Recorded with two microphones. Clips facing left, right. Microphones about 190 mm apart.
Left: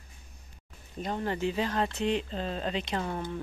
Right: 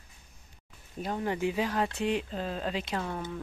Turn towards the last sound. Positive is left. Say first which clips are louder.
# left 1 dB
turn(degrees=5)  # may be behind; listen again after turning